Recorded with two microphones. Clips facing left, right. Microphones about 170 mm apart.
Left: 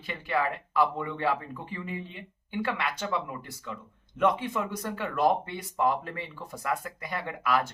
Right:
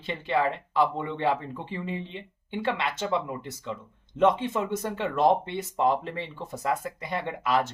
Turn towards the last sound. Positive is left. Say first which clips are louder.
# right 2 dB
turn(degrees=-25)  # may be behind; listen again after turning